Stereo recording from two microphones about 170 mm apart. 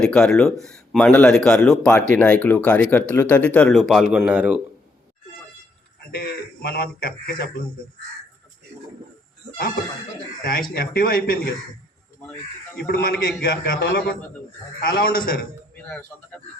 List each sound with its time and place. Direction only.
0.0 s speech: 5° left (ahead or behind)
6.1 s speech: 65° left (ahead or behind)
10.8 s speech: 60° left (ahead or behind)
12.7 s speech: 65° left (ahead or behind)